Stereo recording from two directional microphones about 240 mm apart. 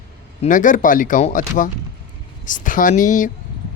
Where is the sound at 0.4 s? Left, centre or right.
Left.